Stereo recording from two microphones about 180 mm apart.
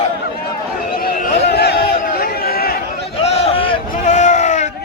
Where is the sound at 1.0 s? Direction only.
60° left (ahead or behind).